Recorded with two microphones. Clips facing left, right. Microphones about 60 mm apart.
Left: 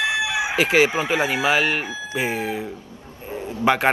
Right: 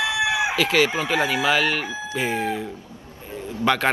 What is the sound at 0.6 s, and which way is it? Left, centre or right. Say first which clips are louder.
Speech: left 6 dB; left.